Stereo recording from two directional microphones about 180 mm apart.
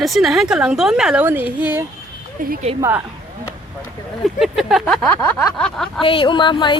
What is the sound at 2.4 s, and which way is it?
Speech, 50° right (ahead or behind).